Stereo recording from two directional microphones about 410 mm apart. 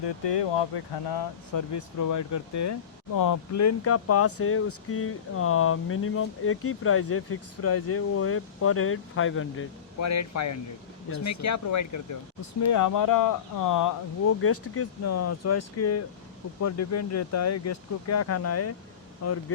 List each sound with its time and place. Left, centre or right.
0.0 s speech: left
1.1 s speech: left
14.4 s speech: left